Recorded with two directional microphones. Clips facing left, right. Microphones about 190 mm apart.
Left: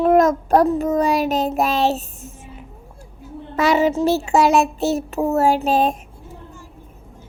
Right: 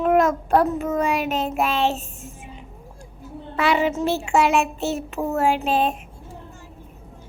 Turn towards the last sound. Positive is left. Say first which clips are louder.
# left 3 dB
turn(degrees=40)  # may be behind; listen again after turning